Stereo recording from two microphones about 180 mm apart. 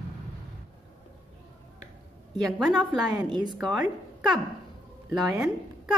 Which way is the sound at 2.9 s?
25° right (ahead or behind).